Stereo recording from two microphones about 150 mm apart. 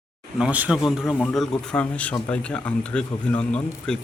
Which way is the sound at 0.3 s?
10° right (ahead or behind).